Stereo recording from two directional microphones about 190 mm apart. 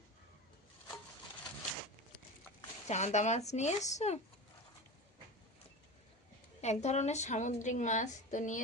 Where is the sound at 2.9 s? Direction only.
35° left (ahead or behind).